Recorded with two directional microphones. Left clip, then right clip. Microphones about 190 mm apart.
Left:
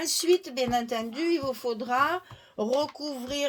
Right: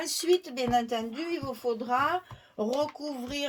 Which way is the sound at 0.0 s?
40° left (ahead or behind).